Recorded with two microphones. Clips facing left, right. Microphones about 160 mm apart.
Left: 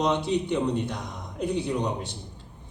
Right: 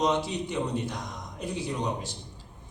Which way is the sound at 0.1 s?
60° left (ahead or behind).